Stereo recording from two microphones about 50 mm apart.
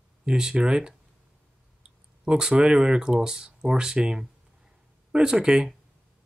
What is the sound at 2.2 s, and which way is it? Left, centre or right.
Speech, centre.